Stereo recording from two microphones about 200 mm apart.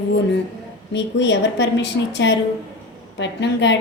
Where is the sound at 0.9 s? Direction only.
60° left (ahead or behind).